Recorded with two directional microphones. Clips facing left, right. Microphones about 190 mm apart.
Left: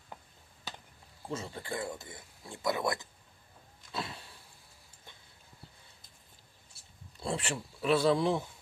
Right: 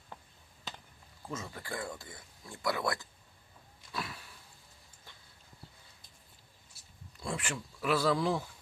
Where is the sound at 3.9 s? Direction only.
25° left (ahead or behind).